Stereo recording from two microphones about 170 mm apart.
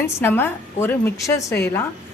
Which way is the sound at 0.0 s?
15° left (ahead or behind).